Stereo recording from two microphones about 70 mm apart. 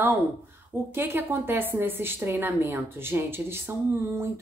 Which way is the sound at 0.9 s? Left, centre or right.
Right.